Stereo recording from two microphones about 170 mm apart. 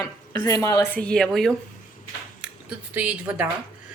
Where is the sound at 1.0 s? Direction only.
5° left (ahead or behind).